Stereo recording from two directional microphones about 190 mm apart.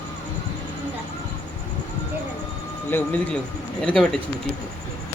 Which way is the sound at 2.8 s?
10° left (ahead or behind).